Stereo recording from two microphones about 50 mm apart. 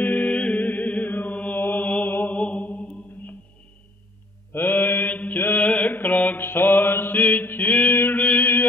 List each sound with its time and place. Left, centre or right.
0.0 s music: left
0.3 s music: left
0.6 s mantra: left
2.0 s mantra: left
2.3 s mantra: left
4.5 s mantra: left
5.6 s mantra: left
6.4 s mantra: left